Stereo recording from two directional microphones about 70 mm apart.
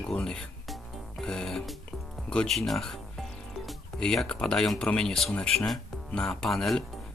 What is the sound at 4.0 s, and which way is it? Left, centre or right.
Speech, centre.